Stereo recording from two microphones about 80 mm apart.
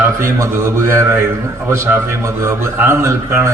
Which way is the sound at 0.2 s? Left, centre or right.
Right.